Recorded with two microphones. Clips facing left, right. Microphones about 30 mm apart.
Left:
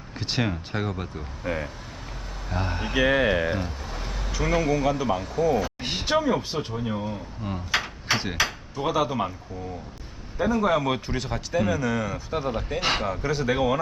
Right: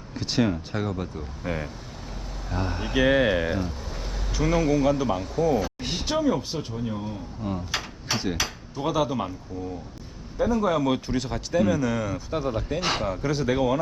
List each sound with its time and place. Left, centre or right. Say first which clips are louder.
0.1 s speech: right 3 dB; centre
1.5 s speech: left 1 dB; left
2.5 s speech: even; centre
3.0 s speech: right 1 dB; left; by 9.3 s centre
10.4 s speech: even; left